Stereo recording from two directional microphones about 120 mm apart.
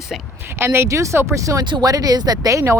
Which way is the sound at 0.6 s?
20° right (ahead or behind).